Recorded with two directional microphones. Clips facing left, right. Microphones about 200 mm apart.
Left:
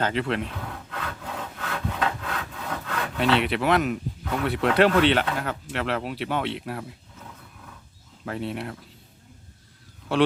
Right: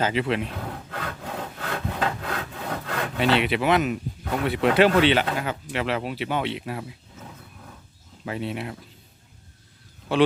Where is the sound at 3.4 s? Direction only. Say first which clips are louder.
Right 1 dB; centre (ahead or behind).